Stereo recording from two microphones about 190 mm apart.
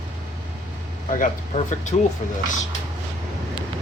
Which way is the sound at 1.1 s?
40° left (ahead or behind).